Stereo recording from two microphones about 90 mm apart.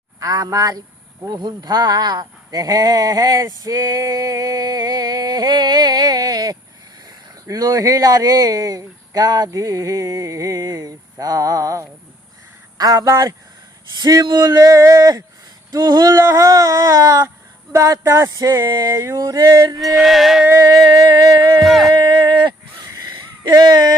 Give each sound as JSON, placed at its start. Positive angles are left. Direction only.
{"t": 0.2, "sound": "speech", "side_deg": -45}
{"t": 14.5, "sound": "speech", "side_deg": -35}
{"t": 15.7, "sound": "speech", "side_deg": -50}
{"t": 16.0, "sound": "speech", "side_deg": -35}
{"t": 19.8, "sound": "music", "side_deg": 0}
{"t": 20.7, "sound": "speech", "side_deg": -40}
{"t": 21.1, "sound": "speech", "side_deg": -50}
{"t": 21.6, "sound": "music", "side_deg": 0}
{"t": 21.9, "sound": "speech", "side_deg": -60}
{"t": 22.9, "sound": "a sound", "side_deg": -45}